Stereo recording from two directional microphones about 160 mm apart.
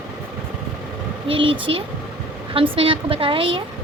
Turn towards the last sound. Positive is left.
turn(degrees=-35)  # may be behind; listen again after turning